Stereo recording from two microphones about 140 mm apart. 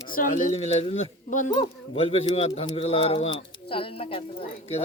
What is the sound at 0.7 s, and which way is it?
Speech, 45° left (ahead or behind).